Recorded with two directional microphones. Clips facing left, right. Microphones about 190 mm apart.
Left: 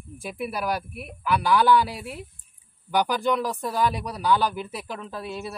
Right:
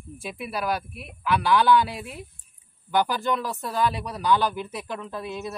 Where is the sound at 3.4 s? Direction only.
15° left (ahead or behind).